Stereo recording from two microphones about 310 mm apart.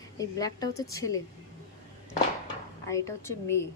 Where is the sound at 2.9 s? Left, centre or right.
Centre.